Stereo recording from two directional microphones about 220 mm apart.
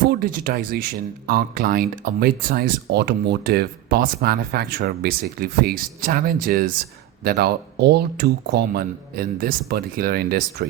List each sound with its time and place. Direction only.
0.1 s speech: 40° right (ahead or behind)